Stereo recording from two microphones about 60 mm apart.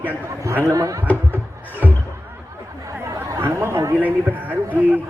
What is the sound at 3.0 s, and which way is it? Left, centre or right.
Chatter, right.